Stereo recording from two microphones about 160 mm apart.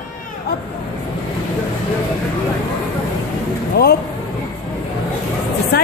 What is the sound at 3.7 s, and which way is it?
Speech, 80° left.